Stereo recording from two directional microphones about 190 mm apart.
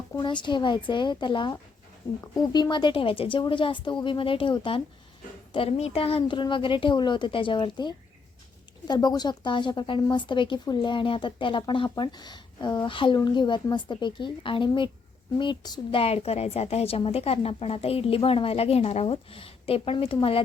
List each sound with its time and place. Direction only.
0.1 s a woman's voice: 25° left (ahead or behind)